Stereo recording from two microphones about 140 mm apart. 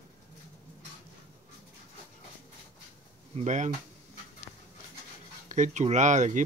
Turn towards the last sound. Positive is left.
turn(degrees=-60)  # may be behind; listen again after turning